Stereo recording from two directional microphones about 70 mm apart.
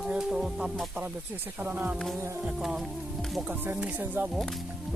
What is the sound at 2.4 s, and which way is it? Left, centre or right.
Music, centre.